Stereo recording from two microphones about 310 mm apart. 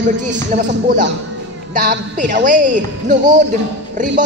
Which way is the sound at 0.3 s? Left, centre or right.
Right.